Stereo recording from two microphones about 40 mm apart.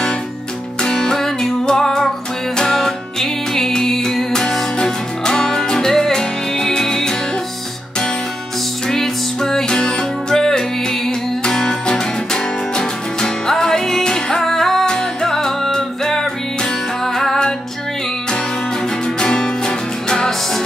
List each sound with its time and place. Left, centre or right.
0.8 s music: centre
8.8 s music: centre
19.1 s music: left